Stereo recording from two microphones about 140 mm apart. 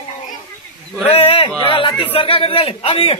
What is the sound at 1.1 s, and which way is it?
A man's voice, 40° left (ahead or behind).